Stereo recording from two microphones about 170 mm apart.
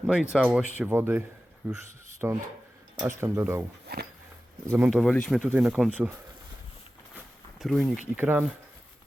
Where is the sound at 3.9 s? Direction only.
70° right (ahead or behind).